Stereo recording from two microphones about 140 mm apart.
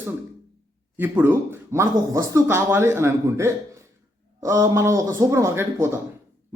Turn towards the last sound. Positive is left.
turn(degrees=-20)  # may be behind; listen again after turning